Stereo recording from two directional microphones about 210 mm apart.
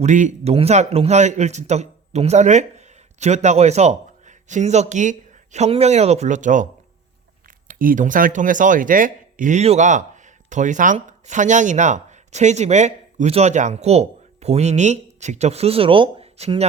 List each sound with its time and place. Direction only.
0.0 s speech: 35° right (ahead or behind)
7.7 s speech: 40° right (ahead or behind)